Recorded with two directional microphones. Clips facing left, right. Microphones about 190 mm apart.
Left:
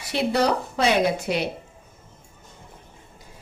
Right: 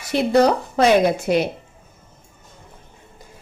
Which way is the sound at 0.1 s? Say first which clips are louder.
Right 6 dB; 45° right (ahead or behind).